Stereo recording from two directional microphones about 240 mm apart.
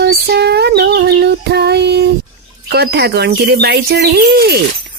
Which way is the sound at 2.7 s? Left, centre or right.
Right.